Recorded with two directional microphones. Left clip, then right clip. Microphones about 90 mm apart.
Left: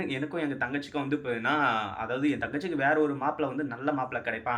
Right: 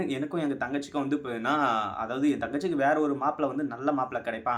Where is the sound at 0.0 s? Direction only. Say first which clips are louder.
Right 1 dB; 50° right (ahead or behind).